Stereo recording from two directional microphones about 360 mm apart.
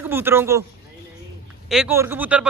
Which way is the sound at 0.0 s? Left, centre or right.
Centre.